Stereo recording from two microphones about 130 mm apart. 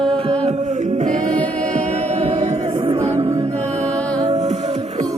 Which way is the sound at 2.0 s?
50° right (ahead or behind).